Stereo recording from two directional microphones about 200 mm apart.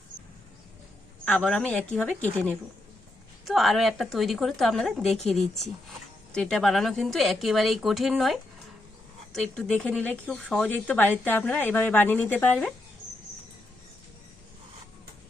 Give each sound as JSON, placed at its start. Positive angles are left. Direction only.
{"t": 1.2, "sound": "a woman's voice", "side_deg": 5}
{"t": 3.4, "sound": "a woman's voice", "side_deg": 0}